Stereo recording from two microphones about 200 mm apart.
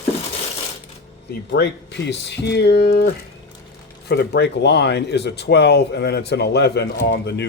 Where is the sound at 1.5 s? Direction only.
60° left (ahead or behind).